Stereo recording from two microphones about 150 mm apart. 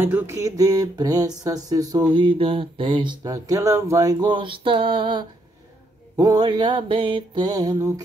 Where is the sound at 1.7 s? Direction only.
25° right (ahead or behind).